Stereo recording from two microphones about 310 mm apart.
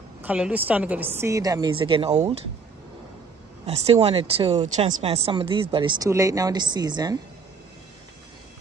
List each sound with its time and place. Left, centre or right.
0.2 s speech: centre
3.6 s speech: centre